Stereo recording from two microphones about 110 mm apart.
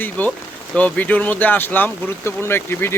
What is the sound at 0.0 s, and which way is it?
Speech, 15° left (ahead or behind).